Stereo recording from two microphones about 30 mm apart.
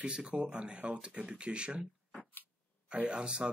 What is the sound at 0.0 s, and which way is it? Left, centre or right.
Speech, right.